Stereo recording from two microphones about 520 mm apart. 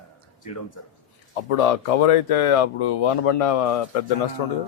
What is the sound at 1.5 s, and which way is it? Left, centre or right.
Speech, left.